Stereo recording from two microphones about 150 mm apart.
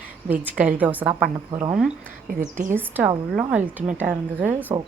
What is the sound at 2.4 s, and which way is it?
Speech, 55° right (ahead or behind).